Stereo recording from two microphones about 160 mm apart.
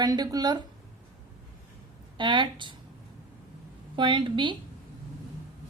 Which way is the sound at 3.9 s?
30° right (ahead or behind).